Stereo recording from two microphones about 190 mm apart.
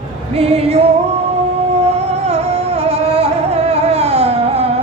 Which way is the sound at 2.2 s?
35° right (ahead or behind).